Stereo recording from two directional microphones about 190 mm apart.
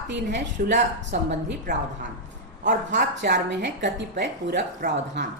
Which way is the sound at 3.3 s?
65° right (ahead or behind).